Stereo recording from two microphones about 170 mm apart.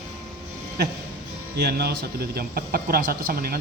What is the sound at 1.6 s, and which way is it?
A man's voice, 70° right (ahead or behind).